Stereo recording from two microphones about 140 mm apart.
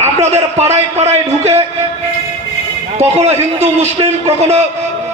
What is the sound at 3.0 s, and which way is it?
A man's voice, 50° right (ahead or behind).